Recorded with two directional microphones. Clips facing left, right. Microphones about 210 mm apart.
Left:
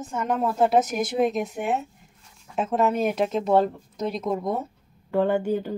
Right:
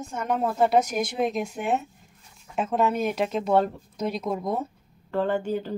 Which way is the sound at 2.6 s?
Centre (ahead or behind).